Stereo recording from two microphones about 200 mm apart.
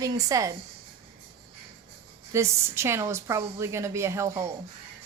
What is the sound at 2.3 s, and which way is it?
A woman's voice, 15° right (ahead or behind).